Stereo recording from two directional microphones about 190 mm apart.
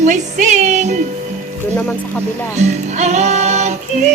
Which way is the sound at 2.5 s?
35° right (ahead or behind).